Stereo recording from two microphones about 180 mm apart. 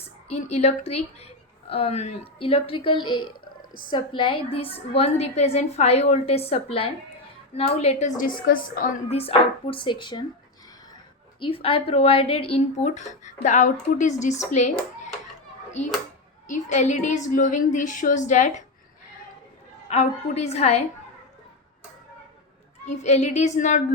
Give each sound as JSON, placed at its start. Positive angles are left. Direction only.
{"t": 0.3, "sound": "speech", "side_deg": 40}
{"t": 8.2, "sound": "speech", "side_deg": 50}
{"t": 9.0, "sound": "speech", "side_deg": 35}
{"t": 11.3, "sound": "speech", "side_deg": 30}
{"t": 16.6, "sound": "speech", "side_deg": 40}
{"t": 19.9, "sound": "speech", "side_deg": 35}
{"t": 23.0, "sound": "speech", "side_deg": 40}